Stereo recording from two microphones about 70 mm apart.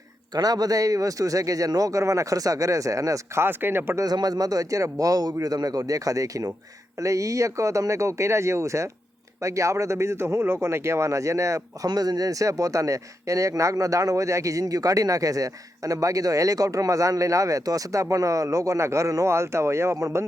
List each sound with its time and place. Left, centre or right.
0.3 s speech: right
3.4 s speech: right
4.0 s speech: right
11.9 s speech: right